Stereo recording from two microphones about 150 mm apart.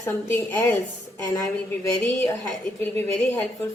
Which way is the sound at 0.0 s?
15° left (ahead or behind).